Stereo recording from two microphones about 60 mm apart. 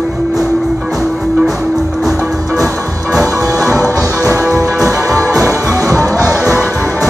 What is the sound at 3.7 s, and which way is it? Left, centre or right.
Music, left.